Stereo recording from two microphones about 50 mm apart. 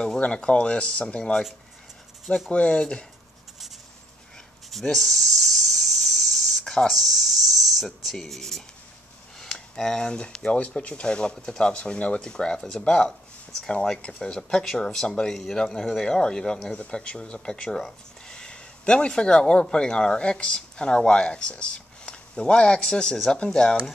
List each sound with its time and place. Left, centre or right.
0.2 s speech: left
2.5 s speech: left
4.9 s a sound: centre
6.9 s speech: centre